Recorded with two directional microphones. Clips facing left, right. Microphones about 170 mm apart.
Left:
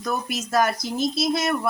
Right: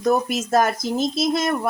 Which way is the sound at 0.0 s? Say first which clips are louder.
Right 7 dB; 45° right (ahead or behind).